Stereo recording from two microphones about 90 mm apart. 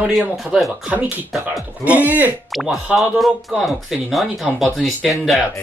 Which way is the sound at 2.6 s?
Centre (ahead or behind).